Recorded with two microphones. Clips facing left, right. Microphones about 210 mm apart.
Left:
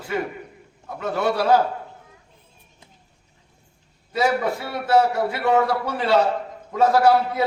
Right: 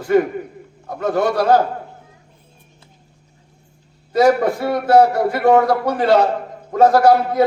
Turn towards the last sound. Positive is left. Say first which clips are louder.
# right 4 dB
turn(degrees=-50)  # may be behind; listen again after turning